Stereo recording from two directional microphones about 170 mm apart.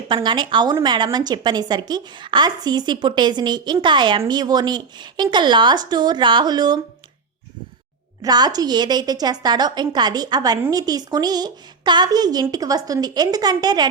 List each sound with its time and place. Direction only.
0.1 s a woman's voice: 25° right (ahead or behind)
8.2 s a woman's voice: 25° right (ahead or behind)